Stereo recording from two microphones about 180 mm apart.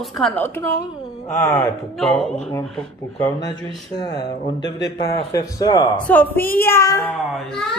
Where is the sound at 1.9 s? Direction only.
Centre (ahead or behind).